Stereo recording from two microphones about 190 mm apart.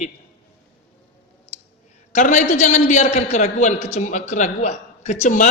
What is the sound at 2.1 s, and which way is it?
A man's voice, 40° left (ahead or behind).